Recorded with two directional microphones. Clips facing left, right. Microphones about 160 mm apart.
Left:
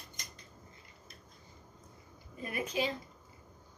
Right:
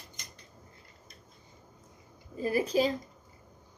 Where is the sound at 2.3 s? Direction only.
30° right (ahead or behind).